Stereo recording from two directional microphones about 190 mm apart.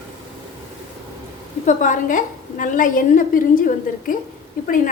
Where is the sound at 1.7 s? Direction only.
40° left (ahead or behind).